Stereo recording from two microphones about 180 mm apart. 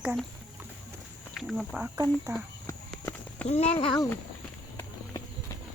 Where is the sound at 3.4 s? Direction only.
35° left (ahead or behind).